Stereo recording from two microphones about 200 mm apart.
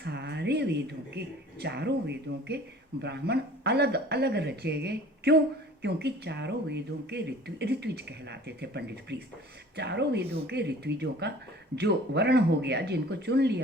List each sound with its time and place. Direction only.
0.0 s speech: 55° right (ahead or behind)